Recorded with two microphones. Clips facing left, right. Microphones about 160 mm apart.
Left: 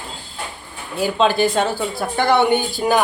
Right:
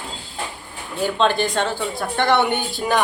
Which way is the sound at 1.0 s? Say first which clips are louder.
Left 3 dB; 5° left (ahead or behind).